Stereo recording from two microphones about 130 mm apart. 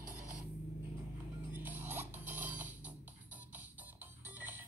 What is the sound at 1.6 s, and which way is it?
Music, 15° right (ahead or behind).